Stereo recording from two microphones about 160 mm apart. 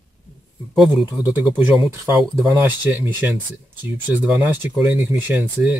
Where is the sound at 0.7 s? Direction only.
10° right (ahead or behind).